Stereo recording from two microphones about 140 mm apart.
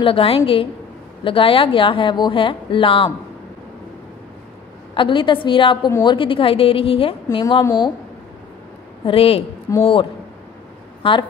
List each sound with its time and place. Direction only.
0.0 s speech: 40° left (ahead or behind)
4.9 s speech: 35° left (ahead or behind)
7.2 s a woman's voice: 30° left (ahead or behind)
9.0 s a woman's voice: 45° left (ahead or behind)
9.7 s speech: 20° left (ahead or behind)
11.0 s speech: 35° left (ahead or behind)